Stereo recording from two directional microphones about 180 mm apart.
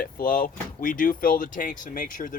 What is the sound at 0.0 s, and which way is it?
Speech, 50° left (ahead or behind).